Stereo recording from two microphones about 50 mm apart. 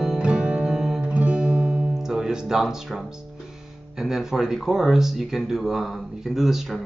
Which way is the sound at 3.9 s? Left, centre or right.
Centre.